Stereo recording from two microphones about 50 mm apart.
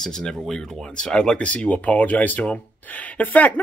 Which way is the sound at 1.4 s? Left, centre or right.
Left.